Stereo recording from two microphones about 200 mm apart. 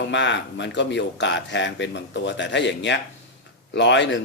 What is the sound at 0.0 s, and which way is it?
Speech, 65° left (ahead or behind).